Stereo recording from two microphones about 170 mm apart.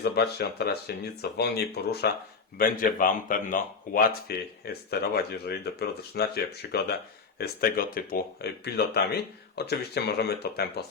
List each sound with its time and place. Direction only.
0.0 s speech: 75° left (ahead or behind)
2.6 s speech: 55° left (ahead or behind)